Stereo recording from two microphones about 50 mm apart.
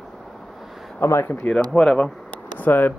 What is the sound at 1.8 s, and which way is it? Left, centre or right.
Speech, centre.